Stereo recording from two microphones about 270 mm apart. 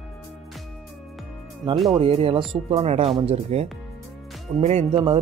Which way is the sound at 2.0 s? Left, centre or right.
Right.